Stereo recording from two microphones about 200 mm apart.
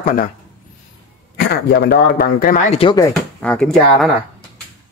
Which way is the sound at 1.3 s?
55° left (ahead or behind).